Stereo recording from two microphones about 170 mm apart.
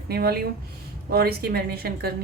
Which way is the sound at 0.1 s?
65° right (ahead or behind).